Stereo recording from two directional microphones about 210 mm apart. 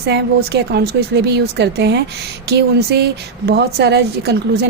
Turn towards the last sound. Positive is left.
turn(degrees=-50)  # may be behind; listen again after turning